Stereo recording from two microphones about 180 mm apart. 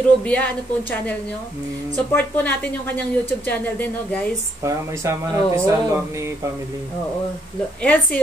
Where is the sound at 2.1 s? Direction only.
10° left (ahead or behind).